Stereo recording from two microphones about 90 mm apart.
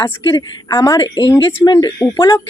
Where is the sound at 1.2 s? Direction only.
55° left (ahead or behind).